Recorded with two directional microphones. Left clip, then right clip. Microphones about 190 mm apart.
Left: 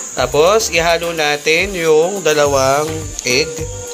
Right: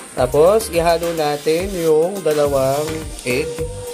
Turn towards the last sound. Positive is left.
turn(degrees=0)  # may be behind; listen again after turning